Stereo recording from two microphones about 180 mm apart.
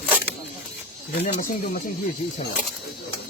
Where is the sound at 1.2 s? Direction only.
55° left (ahead or behind).